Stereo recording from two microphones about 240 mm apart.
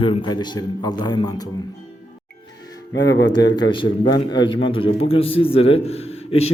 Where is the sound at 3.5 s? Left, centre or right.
Centre.